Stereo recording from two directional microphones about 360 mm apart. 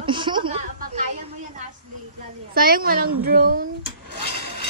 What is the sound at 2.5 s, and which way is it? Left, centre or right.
Speech, right.